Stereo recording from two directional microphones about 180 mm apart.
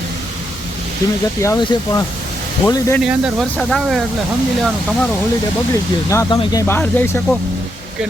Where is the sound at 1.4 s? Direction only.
20° left (ahead or behind).